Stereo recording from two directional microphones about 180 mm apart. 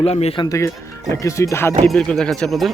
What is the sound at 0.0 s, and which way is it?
Speech, 35° left (ahead or behind).